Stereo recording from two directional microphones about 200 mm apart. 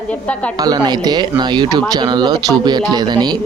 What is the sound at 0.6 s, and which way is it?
Speech, 20° right (ahead or behind).